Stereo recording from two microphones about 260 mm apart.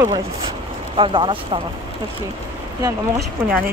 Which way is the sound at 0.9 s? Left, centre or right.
Centre.